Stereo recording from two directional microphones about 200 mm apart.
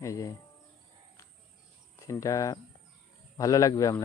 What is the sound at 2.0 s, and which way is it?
A man's voice, 15° left (ahead or behind).